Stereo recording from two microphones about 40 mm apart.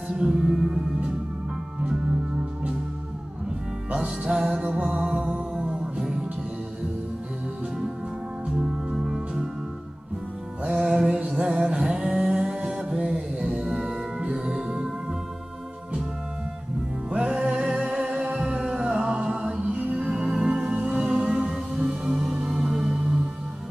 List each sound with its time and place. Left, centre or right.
0.1 s music: centre
4.3 s music: centre
8.5 s music: centre
10.8 s music: centre
11.1 s music: right; by 12.5 s centre
12.6 s music: right
13.6 s music: centre
14.2 s music: right
17.1 s music: right
21.7 s music: centre